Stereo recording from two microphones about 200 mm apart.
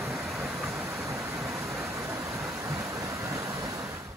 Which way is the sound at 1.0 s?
15° right (ahead or behind).